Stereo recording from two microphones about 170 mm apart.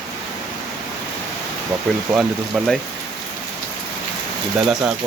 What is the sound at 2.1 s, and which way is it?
Speech, centre (ahead or behind).